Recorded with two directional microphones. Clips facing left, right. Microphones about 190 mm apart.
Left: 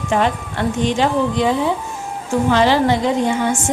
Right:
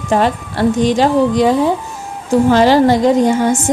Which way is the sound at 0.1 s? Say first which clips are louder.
Right 4 dB; 40° right (ahead or behind).